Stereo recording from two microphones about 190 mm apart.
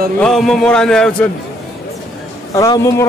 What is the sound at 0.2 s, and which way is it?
A man's voice, centre (ahead or behind).